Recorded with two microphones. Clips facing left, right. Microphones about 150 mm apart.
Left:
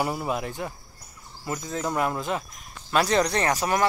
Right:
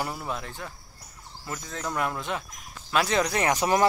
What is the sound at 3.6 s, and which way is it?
Speech, 25° right (ahead or behind).